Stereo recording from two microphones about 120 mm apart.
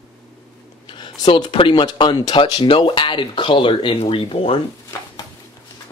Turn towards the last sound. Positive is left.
turn(degrees=50)  # may be behind; listen again after turning